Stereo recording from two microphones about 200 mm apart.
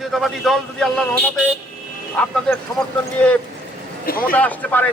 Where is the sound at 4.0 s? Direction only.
45° left (ahead or behind).